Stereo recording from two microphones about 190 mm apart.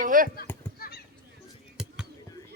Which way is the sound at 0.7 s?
50° left (ahead or behind).